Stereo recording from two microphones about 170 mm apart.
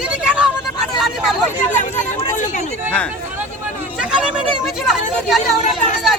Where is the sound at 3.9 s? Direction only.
5° right (ahead or behind).